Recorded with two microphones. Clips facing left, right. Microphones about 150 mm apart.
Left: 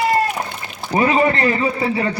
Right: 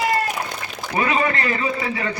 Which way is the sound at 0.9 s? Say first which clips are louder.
Left 5 dB; 30° left (ahead or behind).